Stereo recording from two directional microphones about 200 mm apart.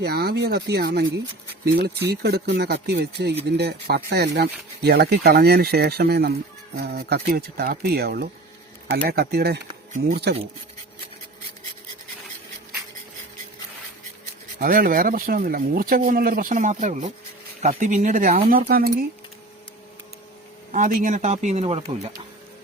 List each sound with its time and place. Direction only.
0.0 s speech: 55° right (ahead or behind)
14.6 s speech: 45° right (ahead or behind)
20.7 s speech: 40° right (ahead or behind)